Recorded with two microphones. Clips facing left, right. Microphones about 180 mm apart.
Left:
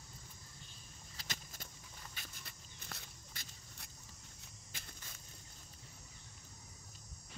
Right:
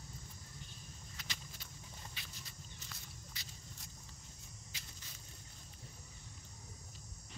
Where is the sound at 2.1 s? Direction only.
55° left (ahead or behind).